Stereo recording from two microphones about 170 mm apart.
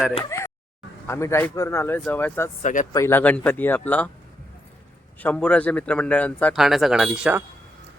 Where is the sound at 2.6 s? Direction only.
45° left (ahead or behind).